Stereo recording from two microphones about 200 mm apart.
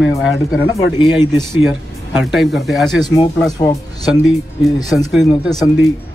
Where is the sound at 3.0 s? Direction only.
20° left (ahead or behind).